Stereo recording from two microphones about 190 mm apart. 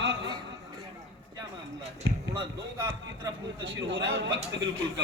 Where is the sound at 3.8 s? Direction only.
70° right (ahead or behind).